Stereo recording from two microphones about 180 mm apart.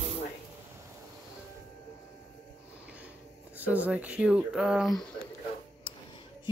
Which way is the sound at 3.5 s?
10° right (ahead or behind).